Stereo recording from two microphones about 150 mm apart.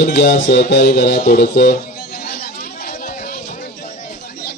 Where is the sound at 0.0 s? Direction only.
75° left (ahead or behind).